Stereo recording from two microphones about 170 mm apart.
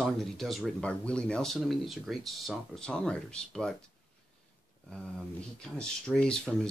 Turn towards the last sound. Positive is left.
turn(degrees=5)  # may be behind; listen again after turning